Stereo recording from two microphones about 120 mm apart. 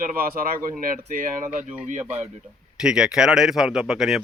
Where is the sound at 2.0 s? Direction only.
15° right (ahead or behind).